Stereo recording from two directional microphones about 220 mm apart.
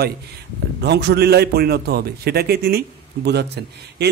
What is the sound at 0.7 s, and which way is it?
A man's voice, 50° right (ahead or behind).